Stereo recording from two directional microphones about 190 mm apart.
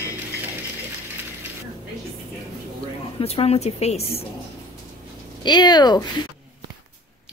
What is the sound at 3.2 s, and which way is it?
Speech, 30° left (ahead or behind).